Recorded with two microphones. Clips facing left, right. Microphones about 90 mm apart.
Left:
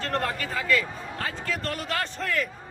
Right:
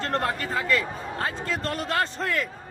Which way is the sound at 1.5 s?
30° right (ahead or behind).